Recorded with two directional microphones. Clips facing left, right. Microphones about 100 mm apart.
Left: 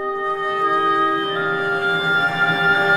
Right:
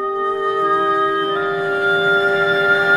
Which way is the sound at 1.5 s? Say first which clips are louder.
Right 3 dB; 20° right (ahead or behind).